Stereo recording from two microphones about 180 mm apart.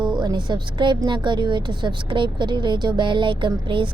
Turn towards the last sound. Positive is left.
turn(degrees=-25)  # may be behind; listen again after turning